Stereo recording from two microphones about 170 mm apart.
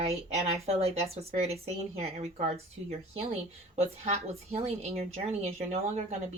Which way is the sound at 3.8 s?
40° right (ahead or behind).